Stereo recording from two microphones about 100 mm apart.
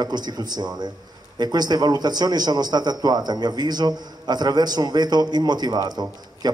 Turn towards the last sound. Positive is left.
turn(degrees=-45)  # may be behind; listen again after turning